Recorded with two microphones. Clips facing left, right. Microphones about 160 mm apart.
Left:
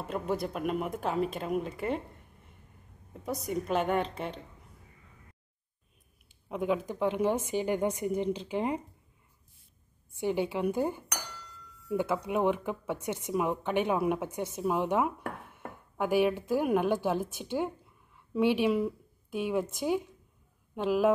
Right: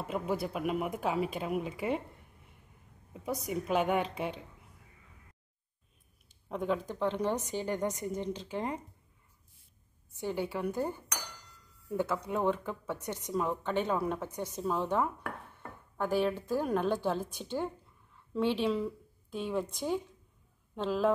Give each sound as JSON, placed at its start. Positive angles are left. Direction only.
{"t": 0.0, "sound": "speech", "side_deg": -5}
{"t": 3.1, "sound": "speech", "side_deg": -10}
{"t": 6.5, "sound": "a woman's voice", "side_deg": 5}
{"t": 10.2, "sound": "a woman's voice", "side_deg": 20}
{"t": 12.0, "sound": "a woman's voice", "side_deg": 15}